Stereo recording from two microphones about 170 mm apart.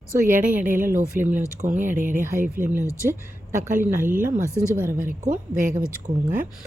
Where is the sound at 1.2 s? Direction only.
10° right (ahead or behind).